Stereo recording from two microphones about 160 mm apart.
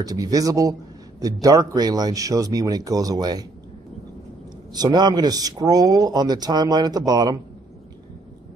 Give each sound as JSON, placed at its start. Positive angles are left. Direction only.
{"t": 0.0, "sound": "speech", "side_deg": -20}
{"t": 4.7, "sound": "speech", "side_deg": -25}